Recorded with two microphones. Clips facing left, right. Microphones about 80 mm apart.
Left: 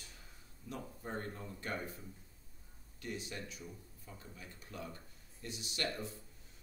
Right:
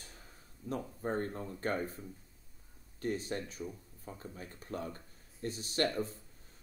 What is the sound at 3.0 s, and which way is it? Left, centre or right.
Speech, right.